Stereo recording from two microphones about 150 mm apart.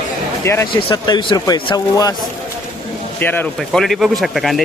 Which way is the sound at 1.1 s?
30° left (ahead or behind).